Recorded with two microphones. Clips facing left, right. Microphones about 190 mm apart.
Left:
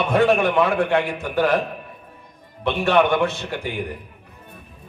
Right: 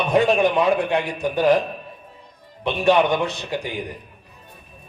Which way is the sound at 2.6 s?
15° right (ahead or behind).